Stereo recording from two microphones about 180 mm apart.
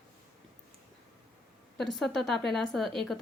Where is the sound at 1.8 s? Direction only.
Centre (ahead or behind).